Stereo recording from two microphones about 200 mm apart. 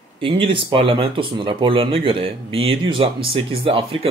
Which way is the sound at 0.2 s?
30° right (ahead or behind).